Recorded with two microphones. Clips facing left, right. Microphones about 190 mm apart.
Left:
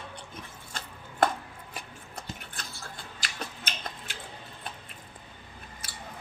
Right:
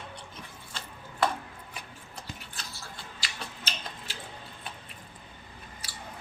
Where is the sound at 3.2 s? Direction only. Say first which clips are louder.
Left 3 dB; 55° left (ahead or behind).